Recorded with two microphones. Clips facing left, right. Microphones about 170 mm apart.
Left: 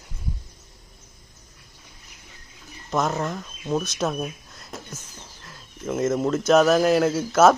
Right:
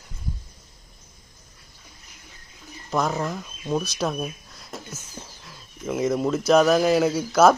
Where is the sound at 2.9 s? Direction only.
Centre (ahead or behind).